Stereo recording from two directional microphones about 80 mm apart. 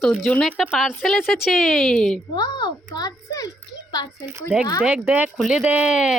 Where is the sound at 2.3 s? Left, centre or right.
Left.